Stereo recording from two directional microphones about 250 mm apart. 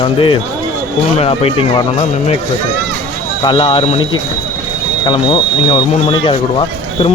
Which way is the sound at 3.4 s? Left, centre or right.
Centre.